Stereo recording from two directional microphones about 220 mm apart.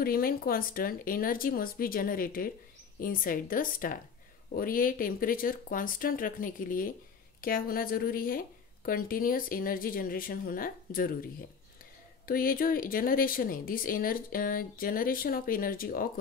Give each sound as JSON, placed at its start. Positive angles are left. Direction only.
{"t": 0.0, "sound": "a woman's voice", "side_deg": 40}
{"t": 12.3, "sound": "a woman's voice", "side_deg": 40}